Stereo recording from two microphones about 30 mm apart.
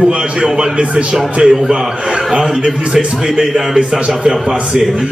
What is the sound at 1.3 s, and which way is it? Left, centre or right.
Speech, right.